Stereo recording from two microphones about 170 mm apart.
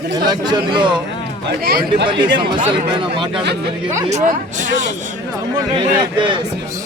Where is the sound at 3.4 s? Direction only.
80° right.